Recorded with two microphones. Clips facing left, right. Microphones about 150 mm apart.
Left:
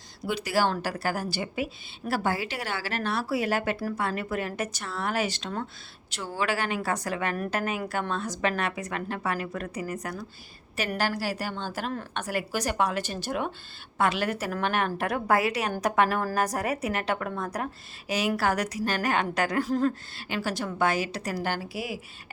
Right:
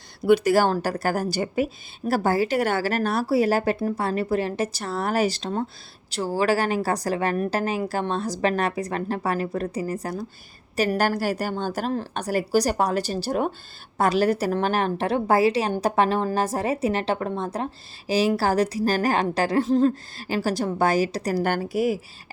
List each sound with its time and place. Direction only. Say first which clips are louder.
0.3 s a woman's voice: right 8 dB; 50° right (ahead or behind); by 19.9 s 25° right (ahead or behind)
20.1 s a woman's voice: right 6 dB; 35° right (ahead or behind)
21.4 s a woman's voice: right 9 dB; 50° right (ahead or behind)